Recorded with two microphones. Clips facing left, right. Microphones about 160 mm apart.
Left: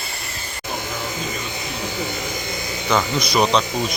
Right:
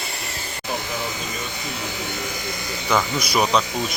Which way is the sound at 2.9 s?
10° right (ahead or behind).